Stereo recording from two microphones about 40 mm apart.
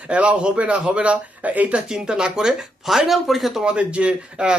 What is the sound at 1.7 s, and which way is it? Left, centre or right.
Speech, centre.